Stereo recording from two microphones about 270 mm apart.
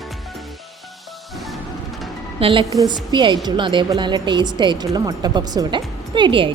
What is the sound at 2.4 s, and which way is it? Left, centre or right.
A woman's voice, centre.